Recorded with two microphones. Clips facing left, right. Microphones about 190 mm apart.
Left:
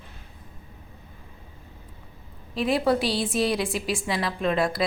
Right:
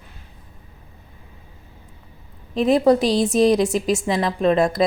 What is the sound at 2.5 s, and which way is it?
A woman's voice, 40° right (ahead or behind).